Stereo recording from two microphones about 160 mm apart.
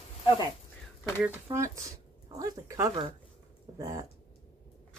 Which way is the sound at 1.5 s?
20° right (ahead or behind).